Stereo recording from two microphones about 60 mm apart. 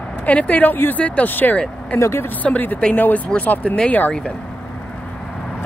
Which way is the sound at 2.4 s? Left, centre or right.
Left.